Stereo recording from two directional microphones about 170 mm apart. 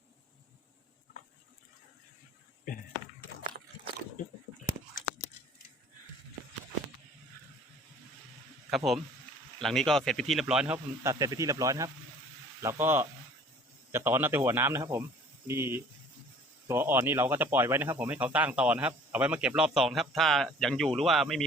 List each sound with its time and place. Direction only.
8.7 s speech: centre (ahead or behind)
11.0 s speech: 20° right (ahead or behind); by 21.4 s centre (ahead or behind)